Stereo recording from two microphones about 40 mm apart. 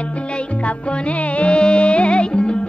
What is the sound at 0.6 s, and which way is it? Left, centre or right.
Music, left.